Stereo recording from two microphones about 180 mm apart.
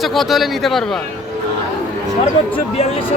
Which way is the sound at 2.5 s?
30° left (ahead or behind).